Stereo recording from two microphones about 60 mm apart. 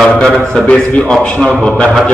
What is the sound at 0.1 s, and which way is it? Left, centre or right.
A man's voice, left.